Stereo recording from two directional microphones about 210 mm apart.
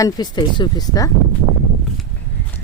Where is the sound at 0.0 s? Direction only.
20° left (ahead or behind).